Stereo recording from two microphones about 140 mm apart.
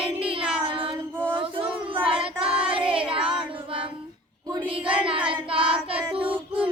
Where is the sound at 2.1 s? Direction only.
40° right (ahead or behind).